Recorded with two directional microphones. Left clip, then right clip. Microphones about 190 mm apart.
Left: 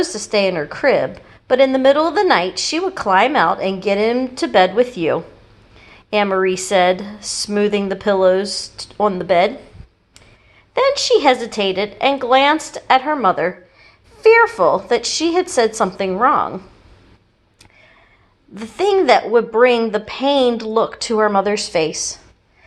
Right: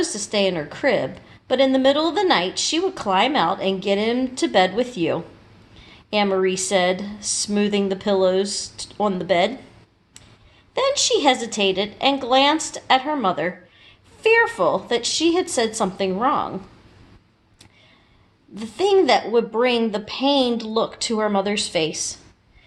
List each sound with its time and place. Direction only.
0.0 s a woman's voice: 20° left (ahead or behind)
10.8 s a woman's voice: 15° left (ahead or behind)
18.5 s a woman's voice: 20° left (ahead or behind)